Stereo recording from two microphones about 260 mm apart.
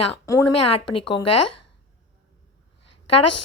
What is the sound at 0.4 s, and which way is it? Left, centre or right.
A woman's voice, left.